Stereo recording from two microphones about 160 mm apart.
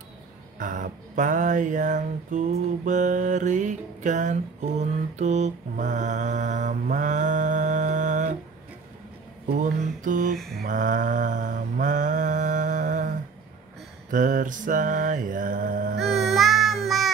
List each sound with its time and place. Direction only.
0.6 s mantra: 55° right (ahead or behind)
9.5 s mantra: 55° right (ahead or behind)
10.3 s mantra: centre (ahead or behind)
10.6 s mantra: 55° right (ahead or behind)
16.0 s music: centre (ahead or behind)